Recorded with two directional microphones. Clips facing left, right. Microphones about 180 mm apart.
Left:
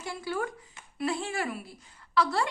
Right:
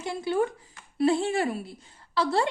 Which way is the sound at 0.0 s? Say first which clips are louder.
Right 6 dB; 25° right (ahead or behind).